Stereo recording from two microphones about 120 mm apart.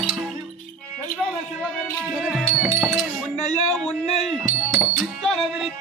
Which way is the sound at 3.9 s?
5° left (ahead or behind).